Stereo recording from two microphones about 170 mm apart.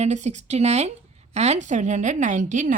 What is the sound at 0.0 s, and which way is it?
A woman's voice, 40° right (ahead or behind).